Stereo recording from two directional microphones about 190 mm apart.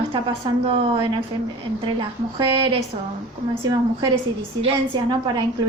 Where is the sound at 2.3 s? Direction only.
25° right (ahead or behind).